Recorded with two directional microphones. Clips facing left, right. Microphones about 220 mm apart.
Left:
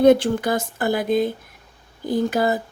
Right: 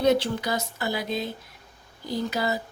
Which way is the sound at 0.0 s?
50° left (ahead or behind).